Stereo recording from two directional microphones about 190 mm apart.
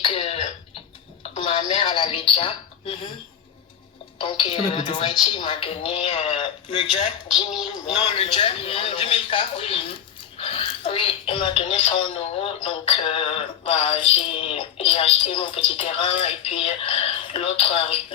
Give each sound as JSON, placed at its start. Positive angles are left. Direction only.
{"t": 0.0, "sound": "cough", "side_deg": 30}
{"t": 1.4, "sound": "a woman's voice", "side_deg": 25}
{"t": 4.2, "sound": "speech", "side_deg": 25}